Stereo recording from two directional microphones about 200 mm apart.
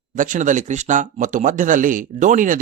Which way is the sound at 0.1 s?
40° right (ahead or behind).